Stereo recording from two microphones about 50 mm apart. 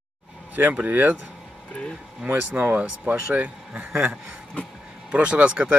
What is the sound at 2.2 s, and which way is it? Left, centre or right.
Speech, right.